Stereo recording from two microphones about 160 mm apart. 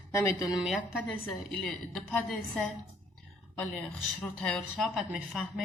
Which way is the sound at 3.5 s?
5° left (ahead or behind).